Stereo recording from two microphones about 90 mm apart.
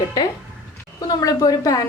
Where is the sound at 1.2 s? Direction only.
40° left (ahead or behind).